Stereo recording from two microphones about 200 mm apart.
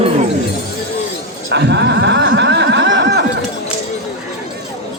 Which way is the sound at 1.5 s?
60° right (ahead or behind).